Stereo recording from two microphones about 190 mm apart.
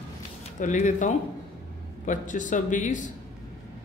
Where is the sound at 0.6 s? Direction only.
40° left (ahead or behind).